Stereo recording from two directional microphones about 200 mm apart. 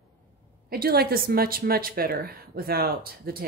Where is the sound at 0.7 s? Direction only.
50° right (ahead or behind).